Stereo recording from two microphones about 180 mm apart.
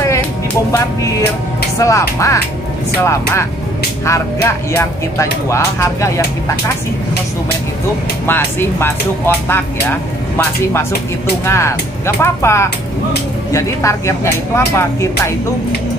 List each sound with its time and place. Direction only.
1.8 s speech: 15° left (ahead or behind)
8.3 s speech: 10° left (ahead or behind)